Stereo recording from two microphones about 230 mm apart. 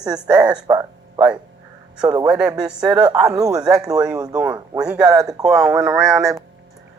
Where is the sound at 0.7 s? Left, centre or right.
Centre.